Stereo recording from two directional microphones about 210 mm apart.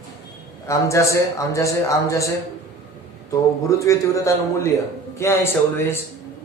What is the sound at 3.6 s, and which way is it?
Speech, 15° left (ahead or behind).